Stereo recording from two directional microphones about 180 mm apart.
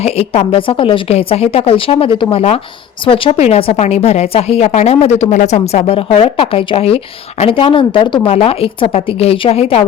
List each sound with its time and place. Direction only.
0.0 s a woman's voice: 35° left (ahead or behind)